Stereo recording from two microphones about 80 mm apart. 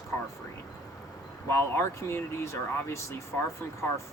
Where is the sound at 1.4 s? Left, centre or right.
Left.